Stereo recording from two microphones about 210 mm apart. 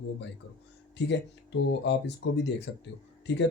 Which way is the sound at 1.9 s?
55° left (ahead or behind).